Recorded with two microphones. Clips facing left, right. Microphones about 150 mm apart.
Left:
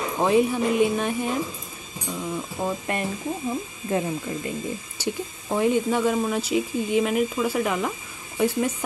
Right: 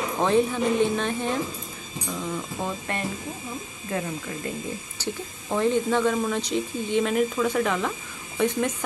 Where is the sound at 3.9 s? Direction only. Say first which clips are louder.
Left 4 dB; 25° left (ahead or behind).